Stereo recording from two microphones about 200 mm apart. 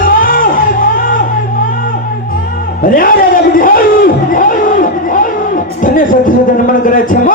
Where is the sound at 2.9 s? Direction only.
45° left (ahead or behind).